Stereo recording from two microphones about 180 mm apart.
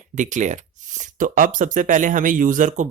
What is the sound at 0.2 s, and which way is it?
Speech, 45° right (ahead or behind).